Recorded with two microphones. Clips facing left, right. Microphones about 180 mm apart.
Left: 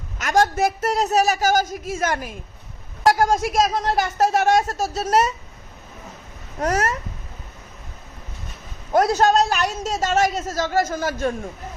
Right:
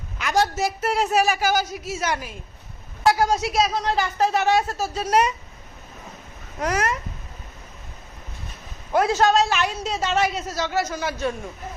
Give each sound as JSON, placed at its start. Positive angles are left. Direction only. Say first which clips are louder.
{"t": 0.2, "sound": "a woman's voice", "louder": "left 3 dB", "side_deg": 50}
{"t": 6.6, "sound": "a woman's voice", "louder": "left 3 dB", "side_deg": 45}
{"t": 8.9, "sound": "a woman's voice", "louder": "left 2 dB", "side_deg": 40}